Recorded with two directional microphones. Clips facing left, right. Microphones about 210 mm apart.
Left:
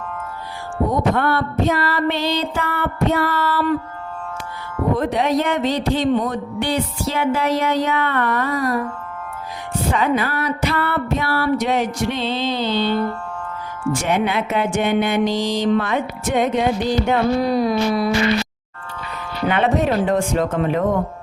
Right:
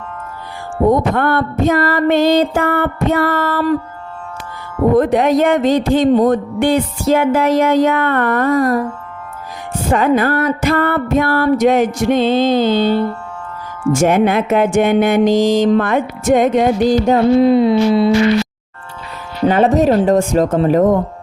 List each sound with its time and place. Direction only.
1.1 s music: 50° right (ahead or behind)
4.9 s music: 50° right (ahead or behind)
9.9 s music: 50° right (ahead or behind)
15.4 s music: 90° right
15.6 s music: 50° right (ahead or behind)
17.2 s music: 25° right (ahead or behind)
19.5 s speech: 40° right (ahead or behind)